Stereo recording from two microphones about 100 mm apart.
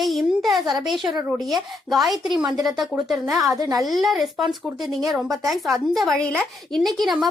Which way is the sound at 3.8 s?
Centre (ahead or behind).